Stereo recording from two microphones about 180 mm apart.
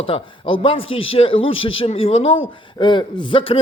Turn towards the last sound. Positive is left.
turn(degrees=30)  # may be behind; listen again after turning